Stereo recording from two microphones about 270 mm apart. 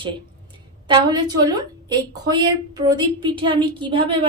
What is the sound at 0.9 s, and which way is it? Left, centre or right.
A woman's voice, centre.